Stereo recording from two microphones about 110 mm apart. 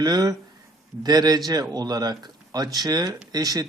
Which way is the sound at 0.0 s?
35° right (ahead or behind).